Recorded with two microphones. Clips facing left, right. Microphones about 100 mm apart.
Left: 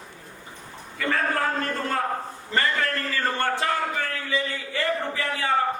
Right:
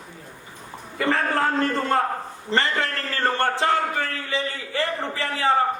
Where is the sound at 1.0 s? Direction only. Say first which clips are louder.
Right 3 dB; 30° right (ahead or behind).